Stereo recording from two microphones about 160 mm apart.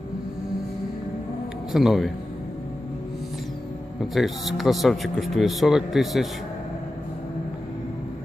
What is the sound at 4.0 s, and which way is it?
Speech, centre (ahead or behind).